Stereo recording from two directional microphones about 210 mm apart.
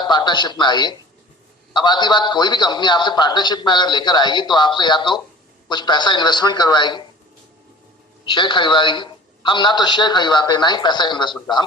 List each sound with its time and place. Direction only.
0.0 s a man's voice: 20° left (ahead or behind)
8.2 s a man's voice: 20° left (ahead or behind)